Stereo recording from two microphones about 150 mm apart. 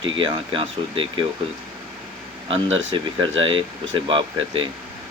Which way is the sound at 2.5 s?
35° right (ahead or behind).